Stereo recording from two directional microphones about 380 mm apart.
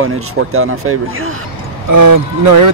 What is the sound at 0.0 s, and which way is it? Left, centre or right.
Speech, right.